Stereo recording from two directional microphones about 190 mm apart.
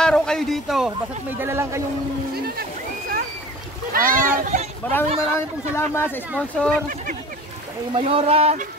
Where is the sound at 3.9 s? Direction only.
45° right (ahead or behind).